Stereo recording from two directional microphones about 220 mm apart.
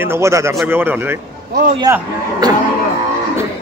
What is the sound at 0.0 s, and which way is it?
A man's voice, 10° right (ahead or behind).